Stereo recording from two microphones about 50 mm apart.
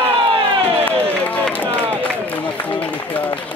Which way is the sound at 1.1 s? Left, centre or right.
Left.